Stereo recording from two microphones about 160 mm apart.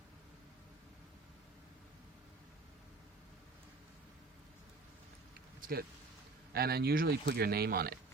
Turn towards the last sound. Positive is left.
turn(degrees=-75)  # may be behind; listen again after turning